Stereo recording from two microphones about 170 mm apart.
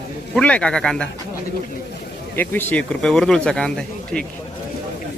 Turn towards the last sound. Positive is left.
turn(degrees=5)  # may be behind; listen again after turning